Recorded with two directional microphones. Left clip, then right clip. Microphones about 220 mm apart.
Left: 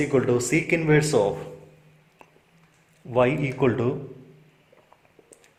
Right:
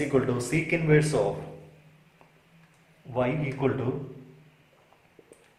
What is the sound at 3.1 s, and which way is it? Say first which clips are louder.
Speech: left 7 dB; 45° left (ahead or behind).